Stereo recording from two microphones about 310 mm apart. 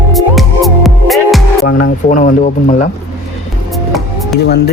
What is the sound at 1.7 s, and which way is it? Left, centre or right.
Speech, left.